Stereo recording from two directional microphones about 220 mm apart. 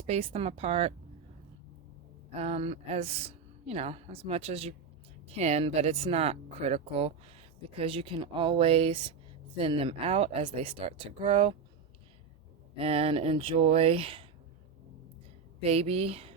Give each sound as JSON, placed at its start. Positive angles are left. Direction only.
{"t": 0.0, "sound": "a woman's voice", "side_deg": -25}
{"t": 2.3, "sound": "a woman's voice", "side_deg": -30}
{"t": 12.7, "sound": "a woman's voice", "side_deg": -25}
{"t": 15.6, "sound": "a woman's voice", "side_deg": -30}